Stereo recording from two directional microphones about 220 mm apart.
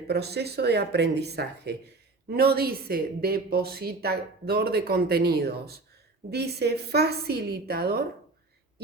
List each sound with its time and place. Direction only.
0.1 s speech: 45° right (ahead or behind)